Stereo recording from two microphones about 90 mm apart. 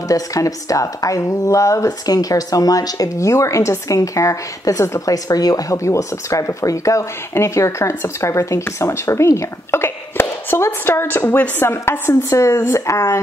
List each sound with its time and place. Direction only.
0.1 s a woman's voice: 40° left (ahead or behind)